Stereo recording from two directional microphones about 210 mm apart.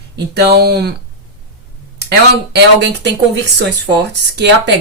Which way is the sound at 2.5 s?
55° right (ahead or behind).